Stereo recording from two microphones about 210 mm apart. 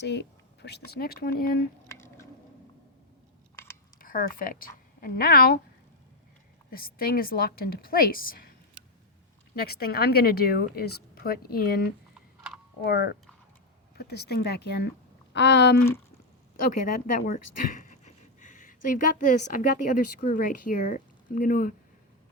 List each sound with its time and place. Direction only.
0.0 s a woman's voice: 55° left (ahead or behind)
1.9 s squish: 10° left (ahead or behind)
3.5 s chewing: 10° left (ahead or behind)
3.9 s a woman's voice: 40° left (ahead or behind)
6.7 s a woman's voice: 45° left (ahead or behind)
9.6 s a woman's voice: 45° left (ahead or behind)
12.8 s a woman's voice: 50° left (ahead or behind)
16.8 s speech: 40° left (ahead or behind)